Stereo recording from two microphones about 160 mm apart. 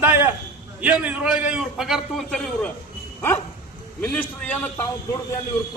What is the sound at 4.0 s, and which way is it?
Speech, 10° left (ahead or behind).